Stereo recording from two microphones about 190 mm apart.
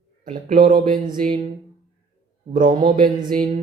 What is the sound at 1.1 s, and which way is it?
Speech, 45° right (ahead or behind).